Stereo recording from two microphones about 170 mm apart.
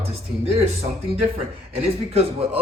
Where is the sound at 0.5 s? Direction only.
35° right (ahead or behind).